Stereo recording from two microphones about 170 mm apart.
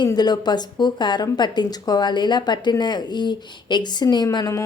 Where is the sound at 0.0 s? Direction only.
25° left (ahead or behind).